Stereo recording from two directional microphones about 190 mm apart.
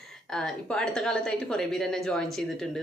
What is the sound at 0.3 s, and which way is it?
Speech, 5° left (ahead or behind).